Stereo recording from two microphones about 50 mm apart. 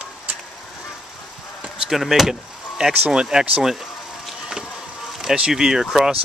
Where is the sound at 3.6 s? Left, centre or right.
Centre.